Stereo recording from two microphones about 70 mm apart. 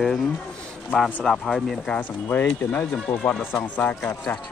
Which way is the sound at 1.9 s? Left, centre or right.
Left.